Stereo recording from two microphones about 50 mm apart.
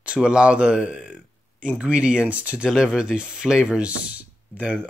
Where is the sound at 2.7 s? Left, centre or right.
Centre.